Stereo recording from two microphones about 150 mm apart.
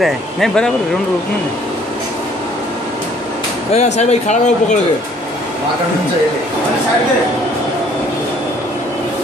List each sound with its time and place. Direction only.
0.0 s speech: 5° left (ahead or behind)
3.7 s speech: 50° left (ahead or behind)